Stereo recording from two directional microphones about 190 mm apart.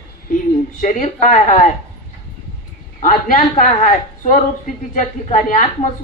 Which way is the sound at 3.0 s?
45° left (ahead or behind).